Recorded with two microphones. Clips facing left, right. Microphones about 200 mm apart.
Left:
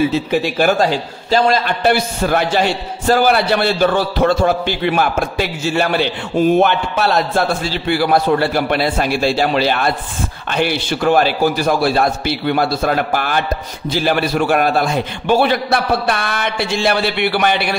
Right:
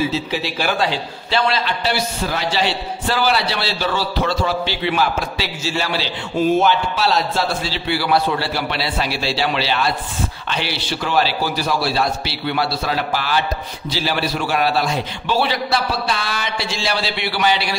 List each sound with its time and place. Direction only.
0.1 s a man's voice: 50° left (ahead or behind)